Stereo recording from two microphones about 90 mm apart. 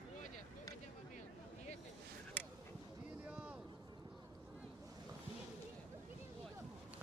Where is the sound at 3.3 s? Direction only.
15° right (ahead or behind).